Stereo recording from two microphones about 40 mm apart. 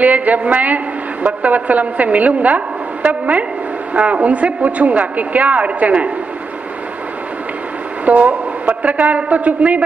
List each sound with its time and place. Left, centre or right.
0.0 s a woman's voice: right
8.0 s a woman's voice: right